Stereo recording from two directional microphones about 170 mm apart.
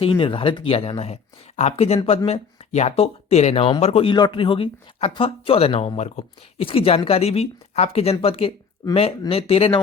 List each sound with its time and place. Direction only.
0.0 s speech: 30° left (ahead or behind)